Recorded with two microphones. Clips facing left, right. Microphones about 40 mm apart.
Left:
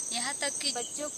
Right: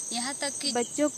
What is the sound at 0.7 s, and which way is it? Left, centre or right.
Speech, right.